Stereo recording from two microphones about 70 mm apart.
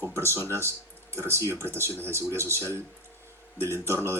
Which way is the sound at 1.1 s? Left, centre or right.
Right.